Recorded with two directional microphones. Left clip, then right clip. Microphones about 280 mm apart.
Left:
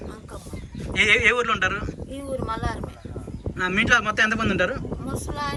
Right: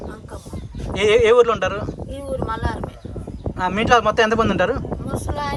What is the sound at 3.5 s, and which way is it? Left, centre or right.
A man's voice, right.